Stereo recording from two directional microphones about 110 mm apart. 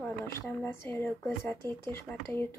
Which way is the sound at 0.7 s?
20° left (ahead or behind).